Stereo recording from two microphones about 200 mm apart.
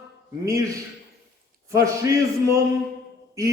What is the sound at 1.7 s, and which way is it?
Speech, 15° right (ahead or behind).